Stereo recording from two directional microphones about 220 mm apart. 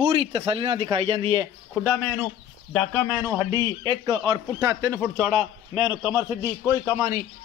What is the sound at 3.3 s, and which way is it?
A man's voice, 15° right (ahead or behind).